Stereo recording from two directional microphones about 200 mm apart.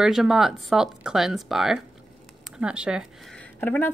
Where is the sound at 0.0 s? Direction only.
Centre (ahead or behind).